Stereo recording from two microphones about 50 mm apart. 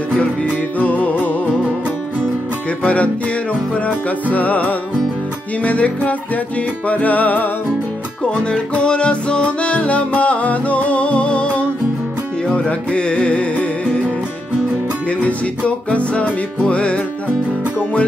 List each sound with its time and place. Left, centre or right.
0.2 s music: left
2.8 s music: left
8.2 s music: left
15.0 s music: left